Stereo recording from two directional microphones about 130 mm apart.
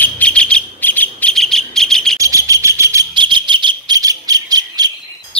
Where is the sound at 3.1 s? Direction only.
40° right (ahead or behind).